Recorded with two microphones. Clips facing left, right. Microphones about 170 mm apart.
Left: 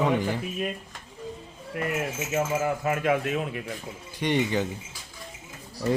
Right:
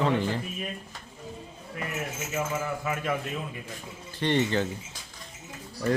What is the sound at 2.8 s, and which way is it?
Speech, 60° left (ahead or behind).